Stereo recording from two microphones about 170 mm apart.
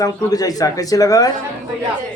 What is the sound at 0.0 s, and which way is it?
A man's voice, 20° left (ahead or behind).